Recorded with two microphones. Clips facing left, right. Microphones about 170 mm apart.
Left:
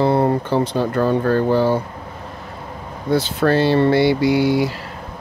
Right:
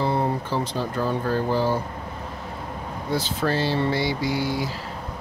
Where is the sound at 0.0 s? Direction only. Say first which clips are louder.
Left 7 dB; 65° left (ahead or behind).